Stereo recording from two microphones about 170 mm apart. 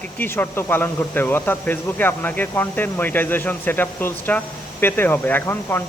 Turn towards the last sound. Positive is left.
turn(degrees=10)  # may be behind; listen again after turning